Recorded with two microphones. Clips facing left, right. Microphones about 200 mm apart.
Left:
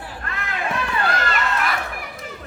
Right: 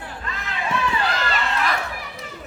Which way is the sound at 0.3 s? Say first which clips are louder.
Even; 55° left (ahead or behind).